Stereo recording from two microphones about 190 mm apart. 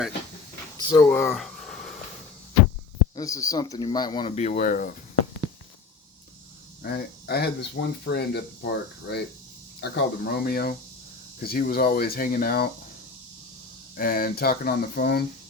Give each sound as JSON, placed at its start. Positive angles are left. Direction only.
{"t": 0.8, "sound": "a sound", "side_deg": 25}
{"t": 1.1, "sound": "speech", "side_deg": 5}
{"t": 3.2, "sound": "speech", "side_deg": 15}
{"t": 4.4, "sound": "speech", "side_deg": 40}
{"t": 6.8, "sound": "speech", "side_deg": 55}
{"t": 13.9, "sound": "speech", "side_deg": 50}